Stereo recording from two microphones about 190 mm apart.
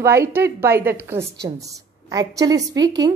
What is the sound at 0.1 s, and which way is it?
A woman's voice, 15° right (ahead or behind).